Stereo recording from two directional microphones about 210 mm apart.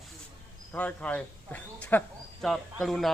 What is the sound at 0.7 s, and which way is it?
Speech, 5° left (ahead or behind).